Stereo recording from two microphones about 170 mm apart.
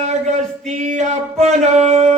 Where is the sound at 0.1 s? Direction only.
45° right (ahead or behind).